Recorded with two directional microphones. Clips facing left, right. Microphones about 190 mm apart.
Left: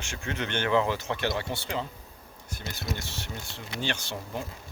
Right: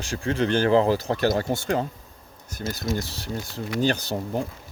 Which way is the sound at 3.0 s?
35° right (ahead or behind).